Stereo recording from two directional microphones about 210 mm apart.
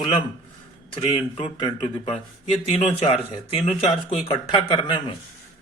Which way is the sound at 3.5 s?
30° left (ahead or behind).